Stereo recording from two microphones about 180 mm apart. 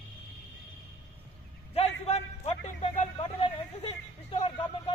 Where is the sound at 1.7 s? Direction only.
35° left (ahead or behind).